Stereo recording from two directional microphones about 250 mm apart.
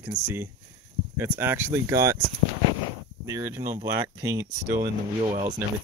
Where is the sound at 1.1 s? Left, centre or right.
Centre.